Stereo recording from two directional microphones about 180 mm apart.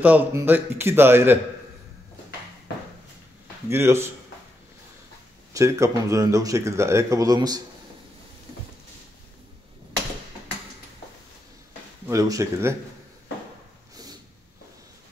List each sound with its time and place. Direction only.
0.0 s speech: 10° right (ahead or behind)
3.6 s speech: 15° right (ahead or behind)
5.5 s speech: 15° right (ahead or behind)
12.1 s speech: 20° right (ahead or behind)